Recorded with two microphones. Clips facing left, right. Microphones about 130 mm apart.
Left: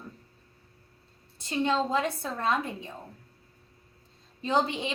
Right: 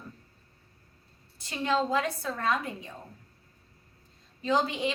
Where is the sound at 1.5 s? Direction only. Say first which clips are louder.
Left 1 dB; 25° left (ahead or behind).